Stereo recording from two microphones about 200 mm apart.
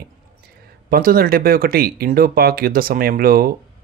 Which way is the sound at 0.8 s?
45° right (ahead or behind).